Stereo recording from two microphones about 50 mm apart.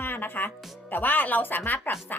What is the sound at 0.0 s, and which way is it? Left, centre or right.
A woman's voice, left.